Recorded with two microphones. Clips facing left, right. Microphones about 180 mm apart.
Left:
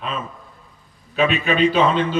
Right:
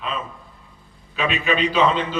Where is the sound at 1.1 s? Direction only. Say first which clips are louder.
Left 4 dB; 50° left (ahead or behind).